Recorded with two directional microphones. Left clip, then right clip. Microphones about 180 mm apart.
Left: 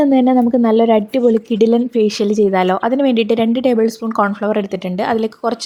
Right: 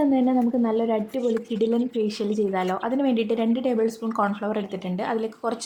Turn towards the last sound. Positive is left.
turn(degrees=30)  # may be behind; listen again after turning